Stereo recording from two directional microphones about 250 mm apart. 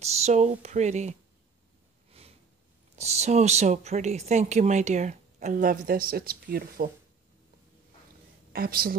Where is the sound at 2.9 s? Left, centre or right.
Right.